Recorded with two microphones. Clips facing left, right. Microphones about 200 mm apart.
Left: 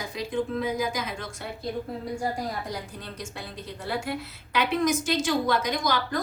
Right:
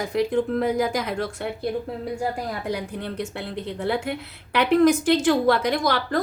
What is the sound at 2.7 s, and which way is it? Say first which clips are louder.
A woman's voice: right 8 dB; 60° right (ahead or behind).